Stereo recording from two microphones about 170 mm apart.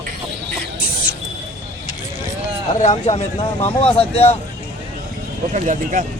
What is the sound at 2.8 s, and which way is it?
Speech, 40° left (ahead or behind).